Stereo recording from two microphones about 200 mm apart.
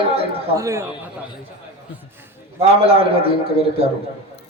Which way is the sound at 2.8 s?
30° right (ahead or behind).